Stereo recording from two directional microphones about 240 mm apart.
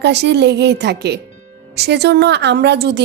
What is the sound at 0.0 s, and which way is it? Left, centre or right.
A woman's voice, right.